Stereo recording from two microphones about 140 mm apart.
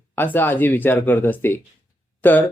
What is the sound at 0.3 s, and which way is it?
Speech, 15° left (ahead or behind).